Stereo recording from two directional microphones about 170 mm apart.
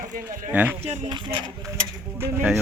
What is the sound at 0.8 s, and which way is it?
Speech, 40° right (ahead or behind).